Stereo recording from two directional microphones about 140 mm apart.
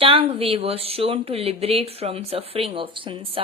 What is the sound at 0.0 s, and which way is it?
Speech, 40° right (ahead or behind).